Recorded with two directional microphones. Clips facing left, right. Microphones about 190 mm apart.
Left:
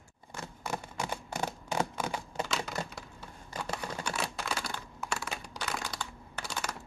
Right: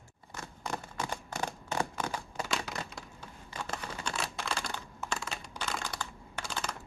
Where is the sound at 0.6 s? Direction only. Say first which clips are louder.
Left 1 dB; 10° left (ahead or behind).